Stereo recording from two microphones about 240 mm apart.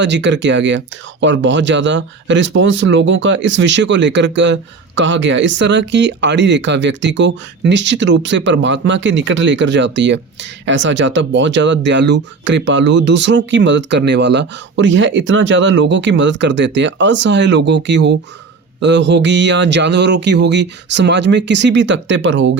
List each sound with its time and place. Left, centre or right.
0.0 s speech: right